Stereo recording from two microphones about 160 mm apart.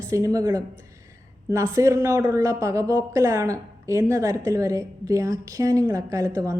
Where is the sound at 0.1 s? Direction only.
20° right (ahead or behind).